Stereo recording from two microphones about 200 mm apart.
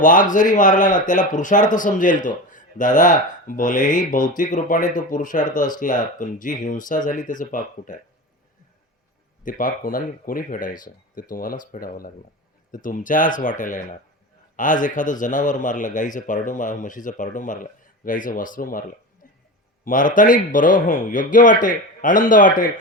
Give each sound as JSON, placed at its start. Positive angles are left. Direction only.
{"t": 0.0, "sound": "speech", "side_deg": 40}
{"t": 9.4, "sound": "speech", "side_deg": 40}